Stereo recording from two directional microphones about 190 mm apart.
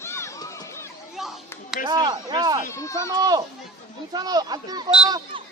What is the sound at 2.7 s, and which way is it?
Speech, 15° left (ahead or behind).